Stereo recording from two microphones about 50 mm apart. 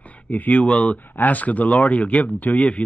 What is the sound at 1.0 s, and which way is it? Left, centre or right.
Speech, left.